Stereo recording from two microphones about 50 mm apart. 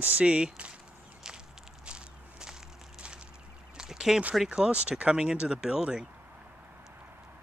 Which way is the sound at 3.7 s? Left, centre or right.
Centre.